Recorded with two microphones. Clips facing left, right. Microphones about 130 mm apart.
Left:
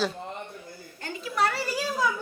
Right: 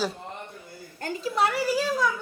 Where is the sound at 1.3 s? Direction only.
20° right (ahead or behind).